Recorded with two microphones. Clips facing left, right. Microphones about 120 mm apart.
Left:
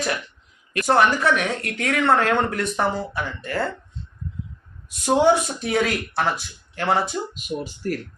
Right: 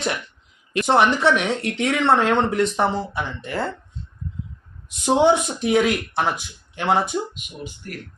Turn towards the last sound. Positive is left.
turn(degrees=40)  # may be behind; listen again after turning